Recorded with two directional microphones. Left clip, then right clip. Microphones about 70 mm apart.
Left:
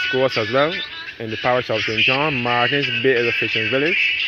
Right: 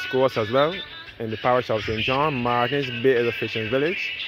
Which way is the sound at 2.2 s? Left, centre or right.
Right.